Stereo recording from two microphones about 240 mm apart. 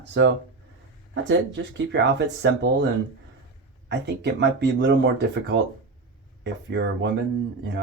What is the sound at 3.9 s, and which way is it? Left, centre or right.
Speech, right.